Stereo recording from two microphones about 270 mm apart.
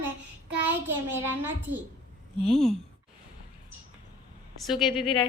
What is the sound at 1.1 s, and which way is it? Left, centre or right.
A child's voice, centre.